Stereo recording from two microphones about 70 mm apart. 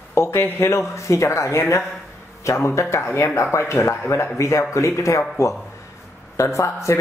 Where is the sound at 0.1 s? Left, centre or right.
Left.